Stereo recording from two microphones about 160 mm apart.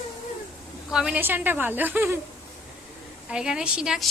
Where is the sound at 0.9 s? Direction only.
5° right (ahead or behind).